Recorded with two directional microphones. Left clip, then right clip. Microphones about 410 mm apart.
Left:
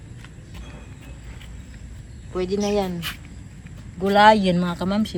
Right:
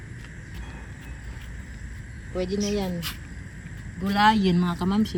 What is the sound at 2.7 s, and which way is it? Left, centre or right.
Speech, centre.